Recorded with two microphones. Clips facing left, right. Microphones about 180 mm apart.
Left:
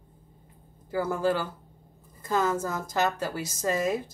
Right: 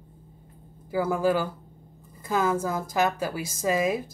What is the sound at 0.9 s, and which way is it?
Speech, 10° right (ahead or behind).